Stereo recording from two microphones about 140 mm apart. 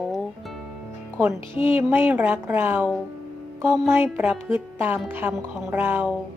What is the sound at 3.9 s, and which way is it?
Speech, 15° right (ahead or behind).